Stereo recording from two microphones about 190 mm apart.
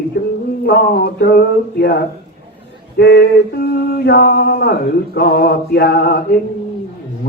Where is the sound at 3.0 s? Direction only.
60° left (ahead or behind).